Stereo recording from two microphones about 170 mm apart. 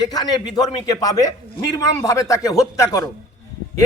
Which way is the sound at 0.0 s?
25° left (ahead or behind).